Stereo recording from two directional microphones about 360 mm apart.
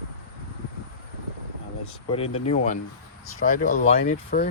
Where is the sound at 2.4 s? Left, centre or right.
Centre.